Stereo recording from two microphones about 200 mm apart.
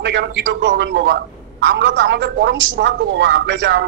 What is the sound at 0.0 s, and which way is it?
A man's voice, 60° right (ahead or behind).